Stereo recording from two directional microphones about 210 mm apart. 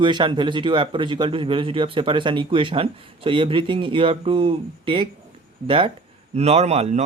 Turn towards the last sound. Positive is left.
turn(degrees=-30)  # may be behind; listen again after turning